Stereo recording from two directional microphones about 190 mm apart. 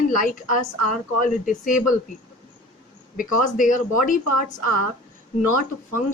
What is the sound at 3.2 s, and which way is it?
Speech, 45° left (ahead or behind).